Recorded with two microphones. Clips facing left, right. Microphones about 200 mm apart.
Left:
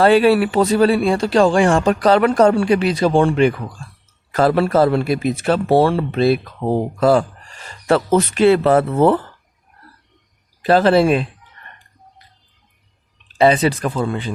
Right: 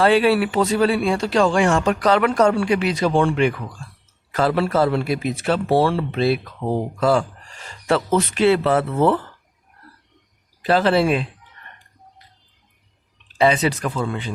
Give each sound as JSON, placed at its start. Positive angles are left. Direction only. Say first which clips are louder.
{"t": 0.0, "sound": "speech", "louder": "left 4 dB", "side_deg": 45}
{"t": 4.3, "sound": "speech", "louder": "left 4 dB", "side_deg": 45}
{"t": 10.6, "sound": "speech", "louder": "left 4 dB", "side_deg": 40}
{"t": 13.4, "sound": "speech", "louder": "left 4 dB", "side_deg": 35}